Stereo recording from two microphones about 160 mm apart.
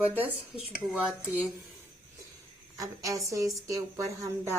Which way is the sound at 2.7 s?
20° right (ahead or behind).